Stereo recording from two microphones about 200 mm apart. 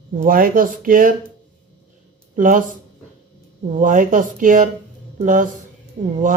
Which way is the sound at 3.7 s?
40° right (ahead or behind).